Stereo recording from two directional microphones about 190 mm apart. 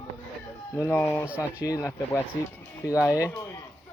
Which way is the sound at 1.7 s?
15° left (ahead or behind).